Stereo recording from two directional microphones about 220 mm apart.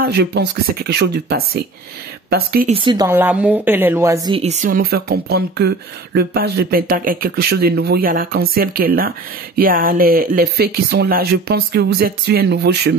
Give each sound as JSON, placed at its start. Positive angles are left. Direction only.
{"t": 0.0, "sound": "speech", "side_deg": -50}
{"t": 2.7, "sound": "a woman's voice", "side_deg": -20}